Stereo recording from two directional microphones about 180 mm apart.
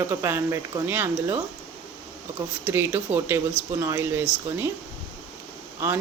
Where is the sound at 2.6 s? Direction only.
10° right (ahead or behind).